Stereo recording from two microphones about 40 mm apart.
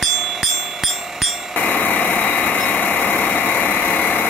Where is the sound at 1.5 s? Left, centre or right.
Left.